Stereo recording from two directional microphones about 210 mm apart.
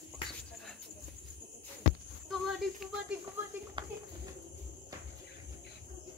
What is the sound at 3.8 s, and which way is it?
Speech, 20° right (ahead or behind).